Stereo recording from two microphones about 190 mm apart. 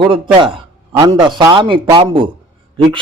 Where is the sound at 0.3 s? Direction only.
25° right (ahead or behind).